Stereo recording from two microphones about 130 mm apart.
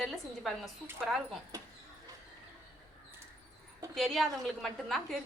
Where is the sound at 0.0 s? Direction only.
Centre (ahead or behind).